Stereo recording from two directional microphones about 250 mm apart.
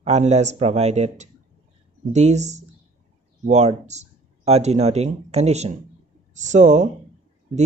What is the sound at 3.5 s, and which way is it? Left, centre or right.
Speech, right.